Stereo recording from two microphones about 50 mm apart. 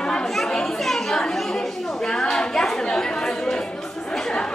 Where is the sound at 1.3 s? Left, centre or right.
Centre.